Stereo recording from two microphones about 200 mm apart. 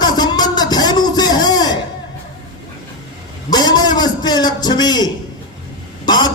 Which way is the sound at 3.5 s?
20° left (ahead or behind).